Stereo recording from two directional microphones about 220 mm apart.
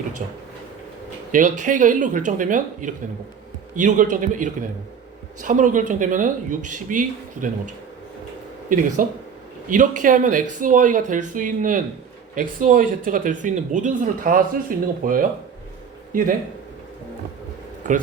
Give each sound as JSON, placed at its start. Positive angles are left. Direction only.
{"t": 0.2, "sound": "speech", "side_deg": -35}
{"t": 8.7, "sound": "speech", "side_deg": -35}